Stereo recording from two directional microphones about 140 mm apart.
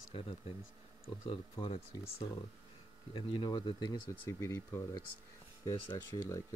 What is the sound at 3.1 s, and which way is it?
Speech, 35° left (ahead or behind).